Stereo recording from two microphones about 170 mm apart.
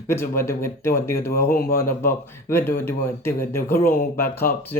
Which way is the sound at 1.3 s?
60° left (ahead or behind).